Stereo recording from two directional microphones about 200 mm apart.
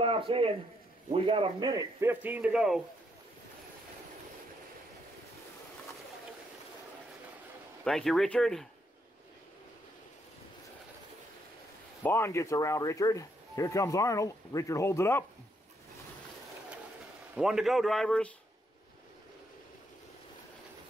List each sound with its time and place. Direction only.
0.0 s a man's voice: 25° right (ahead or behind); by 2.8 s 5° right (ahead or behind)
7.8 s speech: centre (ahead or behind)
12.0 s speech: 10° left (ahead or behind)
17.4 s speech: 5° right (ahead or behind)